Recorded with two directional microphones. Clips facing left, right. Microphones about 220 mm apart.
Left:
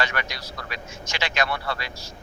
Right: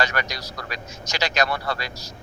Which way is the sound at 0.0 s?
40° right (ahead or behind).